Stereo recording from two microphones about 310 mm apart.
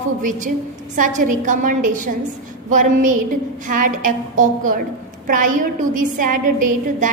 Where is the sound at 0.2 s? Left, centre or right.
Right.